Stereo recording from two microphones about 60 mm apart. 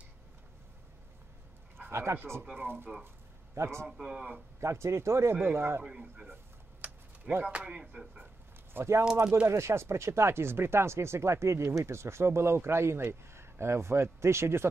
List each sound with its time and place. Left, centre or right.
1.8 s a sound: right
2.5 s speech: right
3.5 s speech: right
3.9 s a man's voice: centre
4.6 s speech: right
5.9 s a man's voice: centre
6.8 s typing: right
7.4 s speech: centre
8.7 s speech: right